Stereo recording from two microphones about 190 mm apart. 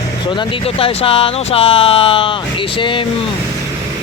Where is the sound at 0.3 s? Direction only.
30° left (ahead or behind).